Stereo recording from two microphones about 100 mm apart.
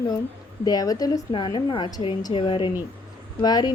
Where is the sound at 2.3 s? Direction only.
60° left (ahead or behind).